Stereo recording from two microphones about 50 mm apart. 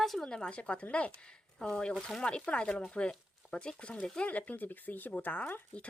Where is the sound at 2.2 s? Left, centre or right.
Left.